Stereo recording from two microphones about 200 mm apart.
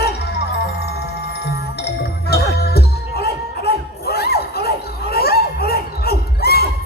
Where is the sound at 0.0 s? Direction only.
55° left (ahead or behind).